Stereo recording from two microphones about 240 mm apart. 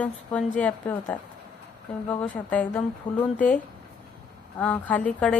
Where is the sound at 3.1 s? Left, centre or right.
Centre.